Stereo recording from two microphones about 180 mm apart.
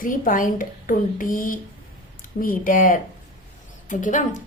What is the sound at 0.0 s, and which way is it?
A woman's voice, 50° left (ahead or behind).